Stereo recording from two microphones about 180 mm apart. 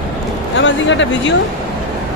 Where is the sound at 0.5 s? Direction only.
90° left.